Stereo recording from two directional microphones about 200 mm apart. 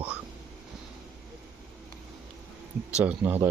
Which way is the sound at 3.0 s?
5° right (ahead or behind).